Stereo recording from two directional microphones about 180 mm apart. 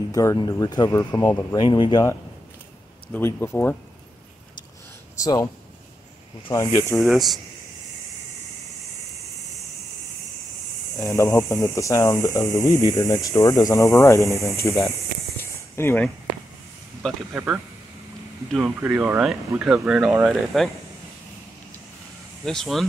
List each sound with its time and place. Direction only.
0.1 s speech: 20° left (ahead or behind)
1.6 s speech: 25° left (ahead or behind)
3.1 s speech: 10° left (ahead or behind)
5.2 s speech: 20° left (ahead or behind)
6.5 s speech: 15° left (ahead or behind)
7.0 s speech: centre (ahead or behind)
11.0 s speech: 20° left (ahead or behind)
15.7 s speech: 10° left (ahead or behind)
17.0 s speech: 10° right (ahead or behind)
22.4 s speech: centre (ahead or behind)